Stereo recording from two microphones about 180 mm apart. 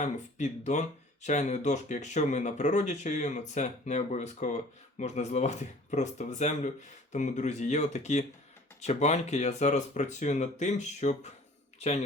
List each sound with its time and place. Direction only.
0.0 s speech: 40° left (ahead or behind)